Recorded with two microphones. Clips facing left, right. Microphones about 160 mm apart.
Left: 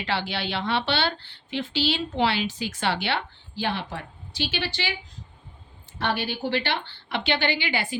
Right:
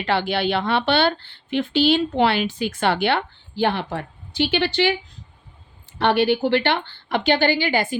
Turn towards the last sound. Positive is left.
turn(degrees=-45)  # may be behind; listen again after turning